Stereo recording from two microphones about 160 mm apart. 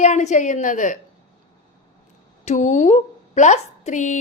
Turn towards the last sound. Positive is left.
turn(degrees=50)  # may be behind; listen again after turning